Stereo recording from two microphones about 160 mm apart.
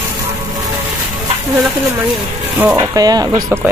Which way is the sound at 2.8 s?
25° right (ahead or behind).